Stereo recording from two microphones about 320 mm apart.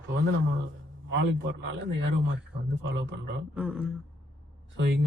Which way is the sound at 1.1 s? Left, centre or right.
Right.